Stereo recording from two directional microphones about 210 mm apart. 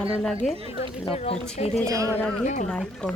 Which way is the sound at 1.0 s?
30° left (ahead or behind).